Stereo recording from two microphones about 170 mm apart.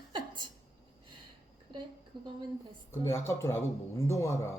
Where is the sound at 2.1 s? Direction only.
25° right (ahead or behind).